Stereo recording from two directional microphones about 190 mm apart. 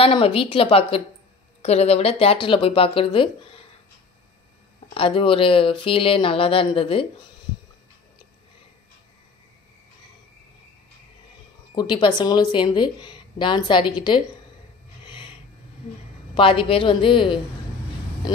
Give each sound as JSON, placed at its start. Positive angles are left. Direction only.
{"t": 0.0, "sound": "a woman's voice", "side_deg": 30}
{"t": 4.9, "sound": "a woman's voice", "side_deg": 30}
{"t": 11.7, "sound": "a woman's voice", "side_deg": 20}
{"t": 15.0, "sound": "snort", "side_deg": 25}
{"t": 16.3, "sound": "a woman's voice", "side_deg": 30}